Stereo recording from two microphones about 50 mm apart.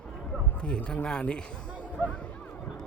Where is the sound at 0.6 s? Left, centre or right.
Left.